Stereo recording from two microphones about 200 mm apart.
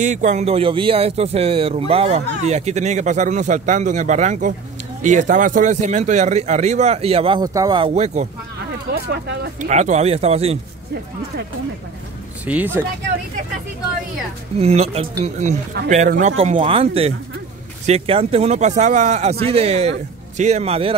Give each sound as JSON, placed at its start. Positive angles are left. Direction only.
{"t": 0.0, "sound": "a man's voice", "side_deg": -35}
{"t": 8.9, "sound": "speech", "side_deg": -55}
{"t": 9.6, "sound": "a man's voice", "side_deg": -35}
{"t": 12.4, "sound": "speech", "side_deg": -10}
{"t": 14.6, "sound": "a man's voice", "side_deg": -30}